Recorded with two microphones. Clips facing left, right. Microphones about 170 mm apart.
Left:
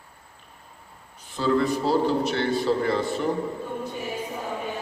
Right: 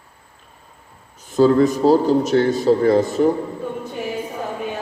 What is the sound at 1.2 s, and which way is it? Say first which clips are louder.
A man's voice: right 9 dB; 45° right (ahead or behind).